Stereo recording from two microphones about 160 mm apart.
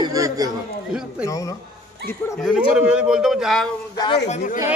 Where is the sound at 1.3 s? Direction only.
20° left (ahead or behind).